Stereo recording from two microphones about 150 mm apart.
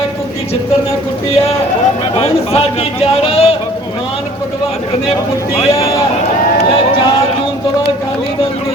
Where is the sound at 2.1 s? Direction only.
40° left (ahead or behind).